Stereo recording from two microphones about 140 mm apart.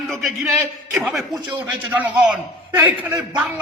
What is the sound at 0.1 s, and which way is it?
A man's voice, centre (ahead or behind).